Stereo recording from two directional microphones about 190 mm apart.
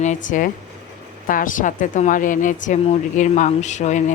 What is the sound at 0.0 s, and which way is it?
A woman's voice, 40° left (ahead or behind).